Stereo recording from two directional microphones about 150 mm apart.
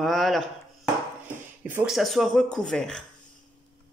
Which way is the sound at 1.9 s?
Centre (ahead or behind).